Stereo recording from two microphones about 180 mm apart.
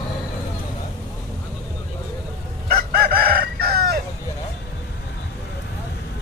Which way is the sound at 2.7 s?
55° right (ahead or behind).